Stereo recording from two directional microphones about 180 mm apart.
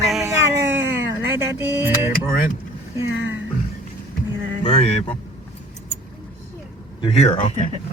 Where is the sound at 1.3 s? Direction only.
10° right (ahead or behind).